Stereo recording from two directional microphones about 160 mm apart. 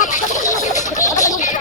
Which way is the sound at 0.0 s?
50° left (ahead or behind).